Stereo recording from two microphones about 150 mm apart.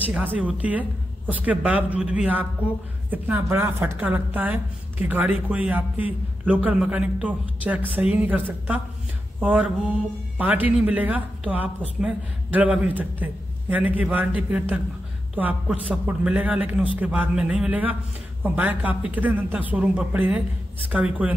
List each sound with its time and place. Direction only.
0.0 s a woman's voice: 10° right (ahead or behind)